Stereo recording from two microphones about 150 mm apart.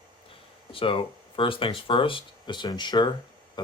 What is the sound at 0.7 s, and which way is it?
Speech, 35° left (ahead or behind).